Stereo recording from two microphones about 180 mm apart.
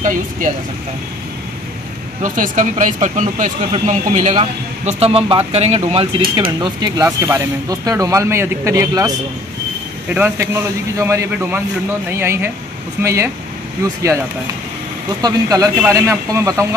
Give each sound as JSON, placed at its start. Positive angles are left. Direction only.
{"t": 0.0, "sound": "speech", "side_deg": -45}
{"t": 2.2, "sound": "a man's voice", "side_deg": -45}
{"t": 15.2, "sound": "speech", "side_deg": -20}